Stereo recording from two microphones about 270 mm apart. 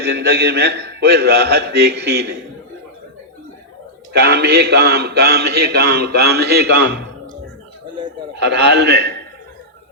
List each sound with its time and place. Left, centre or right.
0.0 s a man's voice: right
4.1 s a man's voice: right
8.4 s a man's voice: right